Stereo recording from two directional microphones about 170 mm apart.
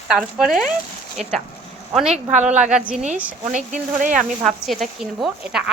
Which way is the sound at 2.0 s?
40° right (ahead or behind).